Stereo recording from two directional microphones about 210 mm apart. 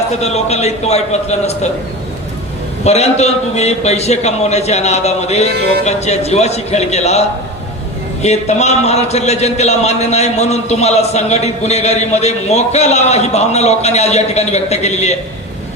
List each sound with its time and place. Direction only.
0.2 s speech: 30° left (ahead or behind)
2.8 s speech: 30° left (ahead or behind)